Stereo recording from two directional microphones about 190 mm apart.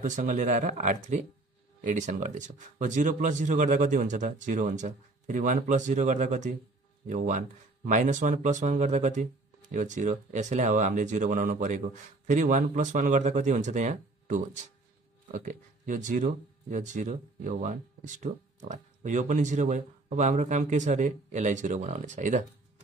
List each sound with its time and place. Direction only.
0.0 s speech: 40° right (ahead or behind)